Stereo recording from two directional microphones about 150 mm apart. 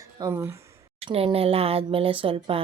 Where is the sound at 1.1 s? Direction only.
40° right (ahead or behind).